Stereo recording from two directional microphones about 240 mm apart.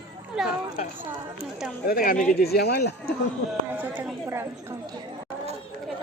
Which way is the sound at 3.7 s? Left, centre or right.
Centre.